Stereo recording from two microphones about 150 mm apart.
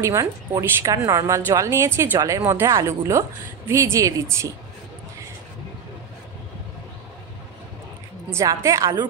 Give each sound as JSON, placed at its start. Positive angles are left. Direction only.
{"t": 0.0, "sound": "a woman's voice", "side_deg": -20}
{"t": 8.3, "sound": "a woman's voice", "side_deg": -20}